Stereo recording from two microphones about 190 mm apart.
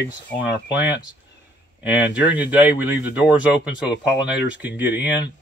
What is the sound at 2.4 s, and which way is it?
Speech, 10° right (ahead or behind).